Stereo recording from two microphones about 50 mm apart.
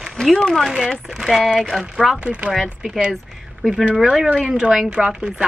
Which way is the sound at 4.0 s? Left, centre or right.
Centre.